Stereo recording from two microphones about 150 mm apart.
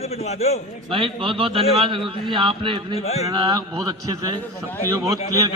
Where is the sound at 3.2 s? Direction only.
25° right (ahead or behind).